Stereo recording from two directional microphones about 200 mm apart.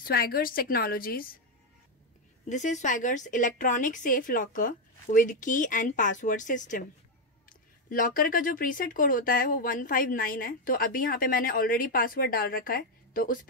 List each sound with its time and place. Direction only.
0.0 s speech: 50° left (ahead or behind)
2.5 s a woman's voice: 35° left (ahead or behind)
7.9 s speech: 45° left (ahead or behind)